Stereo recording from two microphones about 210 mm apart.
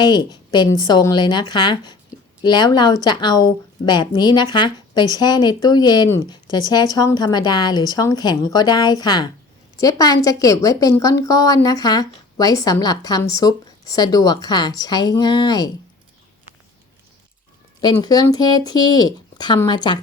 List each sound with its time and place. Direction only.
0.0 s a woman's voice: 20° left (ahead or behind)
17.7 s speech: 20° left (ahead or behind)